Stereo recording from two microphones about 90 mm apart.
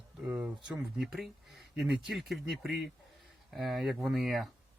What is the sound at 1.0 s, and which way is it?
Speech, centre (ahead or behind).